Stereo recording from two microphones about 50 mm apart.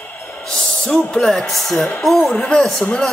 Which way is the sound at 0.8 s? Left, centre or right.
Centre.